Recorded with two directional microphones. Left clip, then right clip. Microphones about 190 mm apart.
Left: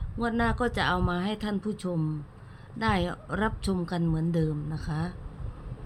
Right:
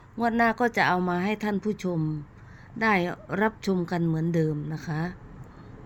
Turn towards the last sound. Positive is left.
turn(degrees=-20)  # may be behind; listen again after turning